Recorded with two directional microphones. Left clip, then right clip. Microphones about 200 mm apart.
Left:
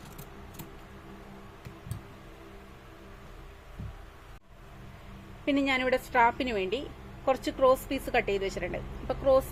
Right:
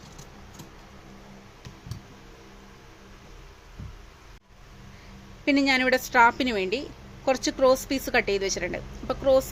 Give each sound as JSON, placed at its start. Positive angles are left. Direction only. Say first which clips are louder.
{"t": 5.5, "sound": "speech", "louder": "right 5 dB", "side_deg": -25}